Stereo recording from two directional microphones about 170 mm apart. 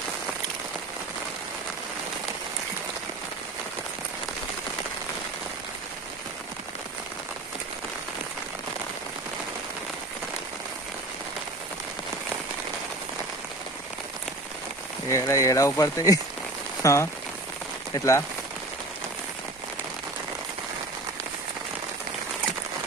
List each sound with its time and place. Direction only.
15.0 s speech: 15° left (ahead or behind)